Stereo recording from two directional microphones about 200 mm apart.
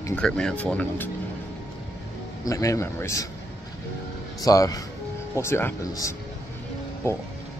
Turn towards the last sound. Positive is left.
turn(degrees=10)  # may be behind; listen again after turning